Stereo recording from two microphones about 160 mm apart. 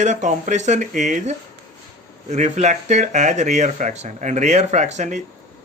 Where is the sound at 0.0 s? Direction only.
45° right (ahead or behind).